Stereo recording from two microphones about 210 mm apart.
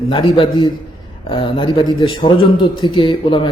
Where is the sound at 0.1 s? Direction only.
25° left (ahead or behind).